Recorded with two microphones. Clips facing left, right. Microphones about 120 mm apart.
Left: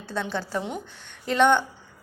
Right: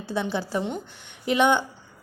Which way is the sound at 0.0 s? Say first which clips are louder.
Right 2 dB; 10° right (ahead or behind).